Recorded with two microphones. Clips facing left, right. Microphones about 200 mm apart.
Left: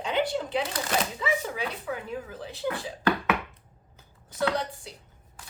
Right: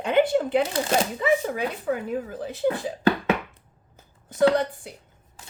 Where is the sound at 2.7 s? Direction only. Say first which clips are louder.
Right 4 dB; 25° right (ahead or behind).